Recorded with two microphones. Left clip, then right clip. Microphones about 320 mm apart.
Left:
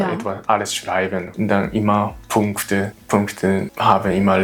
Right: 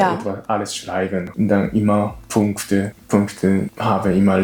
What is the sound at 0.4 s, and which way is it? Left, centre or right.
Speech, left.